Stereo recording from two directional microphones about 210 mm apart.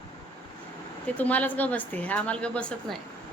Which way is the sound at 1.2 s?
5° left (ahead or behind).